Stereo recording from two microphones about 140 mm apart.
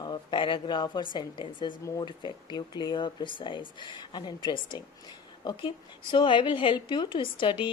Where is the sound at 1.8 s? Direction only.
25° left (ahead or behind).